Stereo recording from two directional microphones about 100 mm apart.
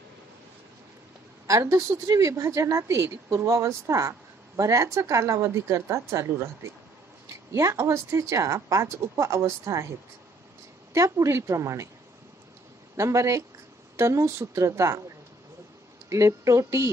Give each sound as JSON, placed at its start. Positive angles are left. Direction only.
{"t": 1.5, "sound": "a woman's voice", "side_deg": -30}
{"t": 7.8, "sound": "a woman's voice", "side_deg": -30}
{"t": 10.9, "sound": "a woman's voice", "side_deg": -30}
{"t": 12.9, "sound": "a woman's voice", "side_deg": -30}
{"t": 16.1, "sound": "a woman's voice", "side_deg": -30}